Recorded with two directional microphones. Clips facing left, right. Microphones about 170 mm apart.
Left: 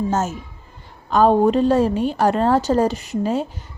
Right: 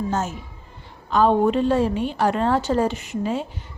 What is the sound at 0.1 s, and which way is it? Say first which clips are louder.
A woman's voice: left 3 dB; 45° left (ahead or behind).